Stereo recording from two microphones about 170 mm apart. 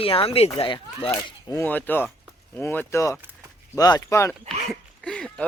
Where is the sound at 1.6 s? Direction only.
10° left (ahead or behind).